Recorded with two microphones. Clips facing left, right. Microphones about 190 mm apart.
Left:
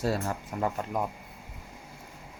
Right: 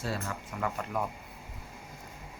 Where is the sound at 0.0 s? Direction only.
40° left (ahead or behind).